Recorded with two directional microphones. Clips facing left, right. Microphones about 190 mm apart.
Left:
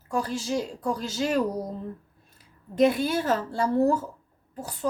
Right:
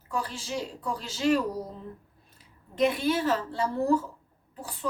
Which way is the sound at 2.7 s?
45° left (ahead or behind).